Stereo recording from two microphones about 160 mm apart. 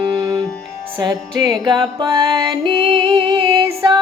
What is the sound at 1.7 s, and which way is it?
Music, 25° right (ahead or behind).